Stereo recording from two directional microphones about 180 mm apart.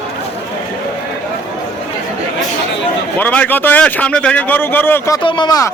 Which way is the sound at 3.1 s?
10° left (ahead or behind).